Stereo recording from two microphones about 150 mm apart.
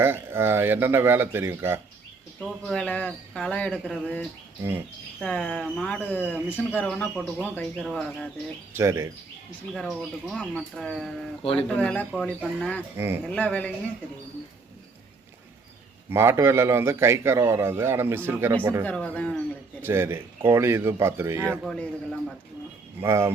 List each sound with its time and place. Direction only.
0.0 s a man's voice: 15° right (ahead or behind)
2.4 s speech: 5° left (ahead or behind)
5.2 s speech: 5° left (ahead or behind)
8.7 s a man's voice: 15° right (ahead or behind)
9.7 s speech: centre (ahead or behind)
12.1 s speech: 5° right (ahead or behind)
13.2 s speech: 10° left (ahead or behind)
16.0 s a man's voice: 15° right (ahead or behind)
18.9 s speech: 10° left (ahead or behind)
19.8 s a man's voice: 15° right (ahead or behind)
21.6 s speech: centre (ahead or behind)
23.0 s a man's voice: 15° right (ahead or behind)